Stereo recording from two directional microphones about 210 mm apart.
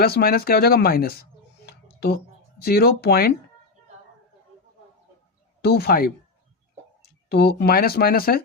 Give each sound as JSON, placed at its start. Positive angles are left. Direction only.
{"t": 0.0, "sound": "speech", "side_deg": 45}
{"t": 1.6, "sound": "a sound", "side_deg": 50}
{"t": 5.6, "sound": "speech", "side_deg": 50}
{"t": 7.3, "sound": "speech", "side_deg": 50}